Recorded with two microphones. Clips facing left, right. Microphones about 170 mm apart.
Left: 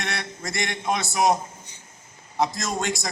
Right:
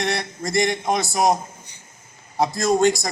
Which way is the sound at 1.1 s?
35° right (ahead or behind).